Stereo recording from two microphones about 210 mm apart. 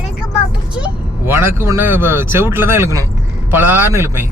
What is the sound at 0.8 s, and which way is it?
A man's voice, 10° right (ahead or behind).